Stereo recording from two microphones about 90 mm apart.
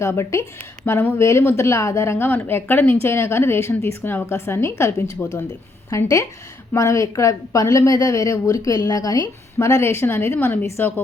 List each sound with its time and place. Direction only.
0.0 s a woman's voice: 30° left (ahead or behind)